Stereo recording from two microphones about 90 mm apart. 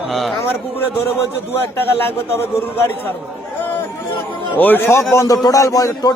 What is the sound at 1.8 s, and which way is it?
Speech, 25° left (ahead or behind).